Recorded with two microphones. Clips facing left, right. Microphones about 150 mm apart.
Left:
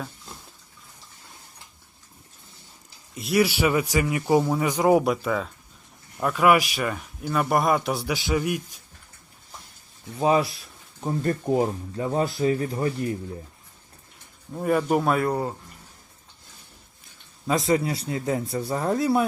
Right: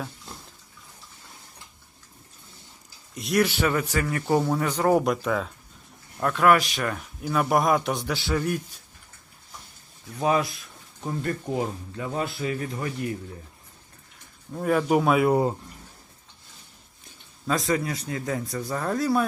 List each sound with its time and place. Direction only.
3.2 s a man's voice: 5° left (ahead or behind)
10.2 s speech: 25° left (ahead or behind)
14.5 s speech: 5° left (ahead or behind)
17.4 s speech: 25° left (ahead or behind)